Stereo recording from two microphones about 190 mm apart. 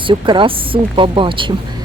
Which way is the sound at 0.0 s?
25° right (ahead or behind).